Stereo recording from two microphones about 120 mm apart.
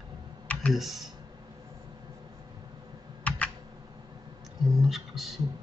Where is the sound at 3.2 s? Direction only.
10° left (ahead or behind).